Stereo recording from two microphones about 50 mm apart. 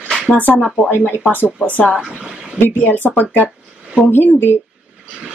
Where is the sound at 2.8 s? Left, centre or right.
Left.